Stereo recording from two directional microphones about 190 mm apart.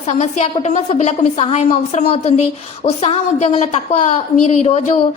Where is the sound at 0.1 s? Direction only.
35° left (ahead or behind).